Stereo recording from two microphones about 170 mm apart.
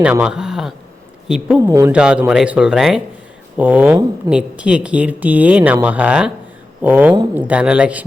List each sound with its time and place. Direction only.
0.0 s speech: 5° right (ahead or behind)
1.6 s speech: 20° right (ahead or behind)
1.9 s speech: 5° right (ahead or behind)